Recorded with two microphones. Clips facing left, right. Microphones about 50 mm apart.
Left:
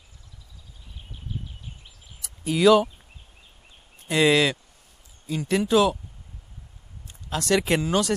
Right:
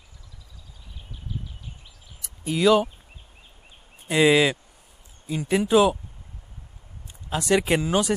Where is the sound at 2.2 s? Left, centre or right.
Centre.